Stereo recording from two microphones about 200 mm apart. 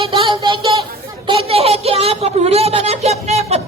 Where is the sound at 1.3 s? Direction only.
30° right (ahead or behind).